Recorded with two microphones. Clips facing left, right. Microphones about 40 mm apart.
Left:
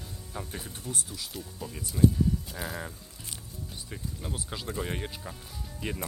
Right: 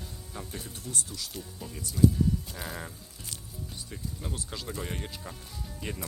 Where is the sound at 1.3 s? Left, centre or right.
Centre.